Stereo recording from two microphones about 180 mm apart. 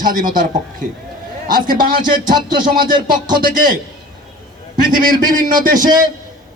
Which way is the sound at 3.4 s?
50° right (ahead or behind).